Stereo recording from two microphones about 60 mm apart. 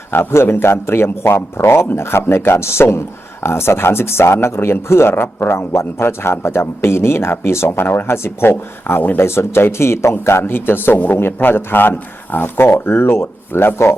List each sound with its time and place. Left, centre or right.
0.1 s a man's voice: left